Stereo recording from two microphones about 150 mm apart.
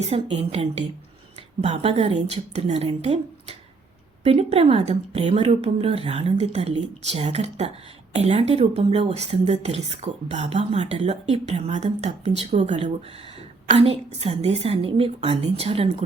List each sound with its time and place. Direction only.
0.0 s a woman's voice: 45° right (ahead or behind)